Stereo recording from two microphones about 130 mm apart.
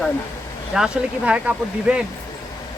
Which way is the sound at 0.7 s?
5° right (ahead or behind).